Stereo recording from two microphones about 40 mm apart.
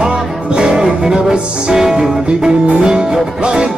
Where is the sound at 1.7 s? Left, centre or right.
Centre.